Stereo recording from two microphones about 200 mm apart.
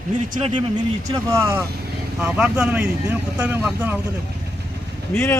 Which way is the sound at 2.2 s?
5° right (ahead or behind).